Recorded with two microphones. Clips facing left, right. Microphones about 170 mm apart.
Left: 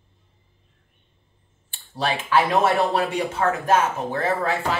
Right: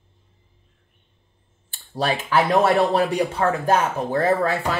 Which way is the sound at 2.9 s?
35° right (ahead or behind).